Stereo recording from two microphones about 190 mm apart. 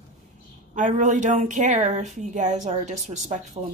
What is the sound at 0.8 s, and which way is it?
Speech, 40° right (ahead or behind).